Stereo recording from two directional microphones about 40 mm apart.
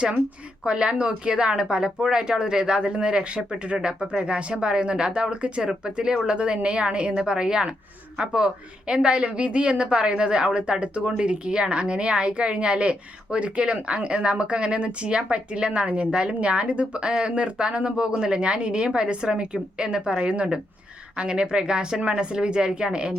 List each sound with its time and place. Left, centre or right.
0.6 s a woman's voice: right
4.2 s a woman's voice: right
4.5 s a woman's voice: centre